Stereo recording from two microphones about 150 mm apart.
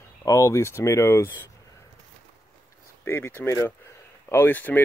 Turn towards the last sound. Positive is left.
turn(degrees=10)  # may be behind; listen again after turning